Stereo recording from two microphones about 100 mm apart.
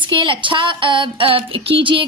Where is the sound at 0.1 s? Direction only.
55° right (ahead or behind).